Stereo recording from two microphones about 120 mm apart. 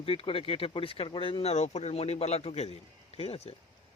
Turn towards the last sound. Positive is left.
turn(degrees=60)  # may be behind; listen again after turning